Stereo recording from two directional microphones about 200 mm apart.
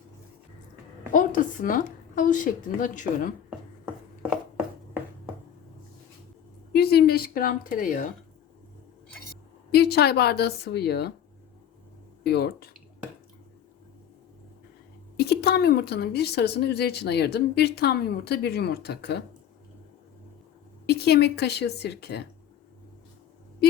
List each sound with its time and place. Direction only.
1.1 s a woman's voice: 40° left (ahead or behind)
6.7 s a woman's voice: 50° left (ahead or behind)
9.7 s a woman's voice: 55° left (ahead or behind)
12.2 s a woman's voice: 55° left (ahead or behind)
15.2 s a woman's voice: 55° left (ahead or behind)
20.8 s speech: 55° left (ahead or behind)